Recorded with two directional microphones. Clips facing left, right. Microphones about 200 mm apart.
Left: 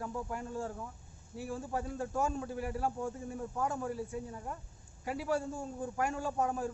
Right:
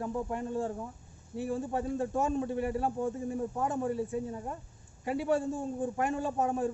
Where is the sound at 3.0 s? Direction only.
20° right (ahead or behind).